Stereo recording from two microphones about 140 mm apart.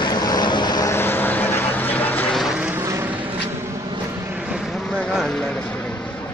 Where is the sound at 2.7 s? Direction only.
20° right (ahead or behind).